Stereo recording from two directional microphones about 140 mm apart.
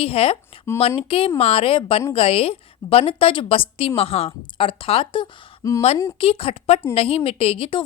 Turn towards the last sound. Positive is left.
turn(degrees=40)  # may be behind; listen again after turning